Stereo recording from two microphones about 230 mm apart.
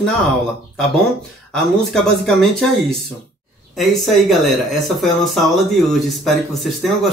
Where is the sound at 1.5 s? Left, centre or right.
Centre.